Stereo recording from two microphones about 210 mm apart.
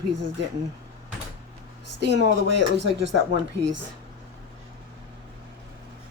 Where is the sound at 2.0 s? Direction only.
55° right (ahead or behind).